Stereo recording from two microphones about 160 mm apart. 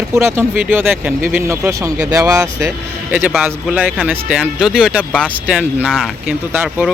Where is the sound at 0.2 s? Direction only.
15° right (ahead or behind).